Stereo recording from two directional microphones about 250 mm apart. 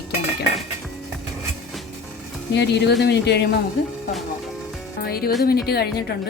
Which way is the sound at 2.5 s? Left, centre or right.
Left.